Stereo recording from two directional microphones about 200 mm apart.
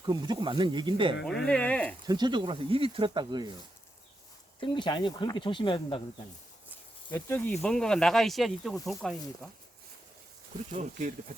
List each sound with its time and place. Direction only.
0.0 s speech: 20° right (ahead or behind)
1.2 s speech: 5° left (ahead or behind)
2.0 s speech: 20° right (ahead or behind)
4.6 s speech: 25° left (ahead or behind)
7.1 s speech: 10° left (ahead or behind)
10.7 s speech: 40° right (ahead or behind)